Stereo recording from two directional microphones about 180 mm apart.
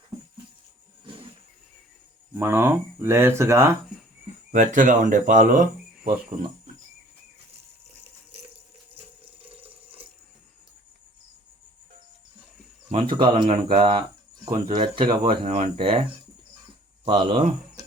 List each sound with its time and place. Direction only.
2.3 s speech: 10° right (ahead or behind)
4.5 s speech: 45° right (ahead or behind)
8.3 s a sound: 35° right (ahead or behind)
9.2 s water: 30° right (ahead or behind)
12.9 s speech: 30° right (ahead or behind)
17.1 s speech: 35° right (ahead or behind)